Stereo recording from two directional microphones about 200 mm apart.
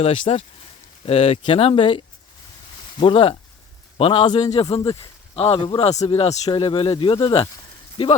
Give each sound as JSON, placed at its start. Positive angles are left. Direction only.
{"t": 0.0, "sound": "a man's voice", "side_deg": 30}